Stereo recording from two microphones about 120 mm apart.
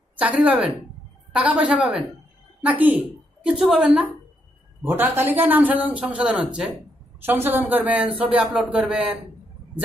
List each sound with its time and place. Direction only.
0.2 s a man's voice: 10° right (ahead or behind)
4.8 s a man's voice: 15° right (ahead or behind)